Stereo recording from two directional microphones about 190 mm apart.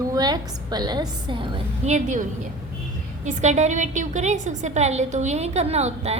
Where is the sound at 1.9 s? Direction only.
40° right (ahead or behind).